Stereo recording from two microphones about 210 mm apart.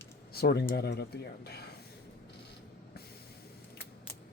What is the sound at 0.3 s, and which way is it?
Speech, 50° left (ahead or behind).